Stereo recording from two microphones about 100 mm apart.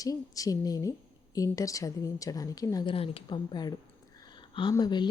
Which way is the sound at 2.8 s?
70° left (ahead or behind).